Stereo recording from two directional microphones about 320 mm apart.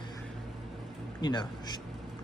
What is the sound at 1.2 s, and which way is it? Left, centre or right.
Speech, centre.